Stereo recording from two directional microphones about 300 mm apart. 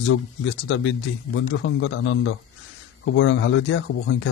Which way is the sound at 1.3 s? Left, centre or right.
Left.